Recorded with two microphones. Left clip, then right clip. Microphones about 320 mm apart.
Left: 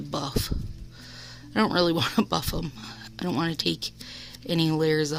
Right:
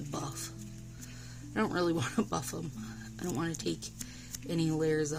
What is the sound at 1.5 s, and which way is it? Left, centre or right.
Speech, left.